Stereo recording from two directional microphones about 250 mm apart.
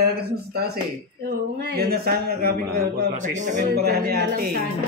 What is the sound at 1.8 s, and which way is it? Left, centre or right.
A man's voice, right.